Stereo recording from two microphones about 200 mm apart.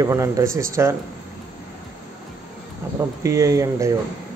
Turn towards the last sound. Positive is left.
turn(degrees=-15)  # may be behind; listen again after turning